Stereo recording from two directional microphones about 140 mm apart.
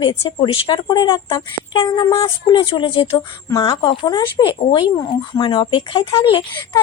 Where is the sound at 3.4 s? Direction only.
25° left (ahead or behind).